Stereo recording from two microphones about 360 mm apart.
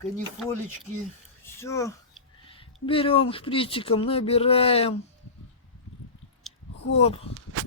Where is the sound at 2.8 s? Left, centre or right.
Centre.